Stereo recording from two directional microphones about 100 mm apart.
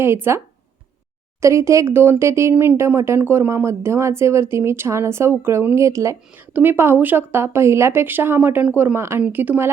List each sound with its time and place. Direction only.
0.0 s speech: 25° right (ahead or behind)
6.5 s speech: 20° right (ahead or behind)